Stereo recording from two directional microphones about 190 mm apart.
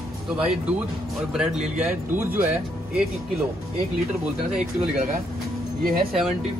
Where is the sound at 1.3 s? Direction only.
5° right (ahead or behind).